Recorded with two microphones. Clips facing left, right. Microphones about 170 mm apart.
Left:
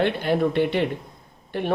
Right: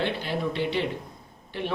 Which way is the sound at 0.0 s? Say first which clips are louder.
Left 7 dB; 55° left (ahead or behind).